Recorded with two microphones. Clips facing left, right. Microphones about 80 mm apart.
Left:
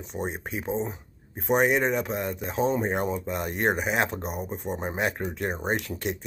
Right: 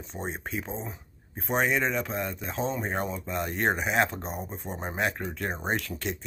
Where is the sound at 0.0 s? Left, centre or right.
Centre.